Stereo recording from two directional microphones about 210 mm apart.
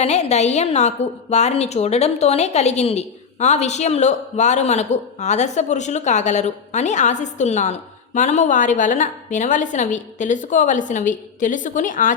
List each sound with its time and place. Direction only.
0.0 s a woman's voice: 30° left (ahead or behind)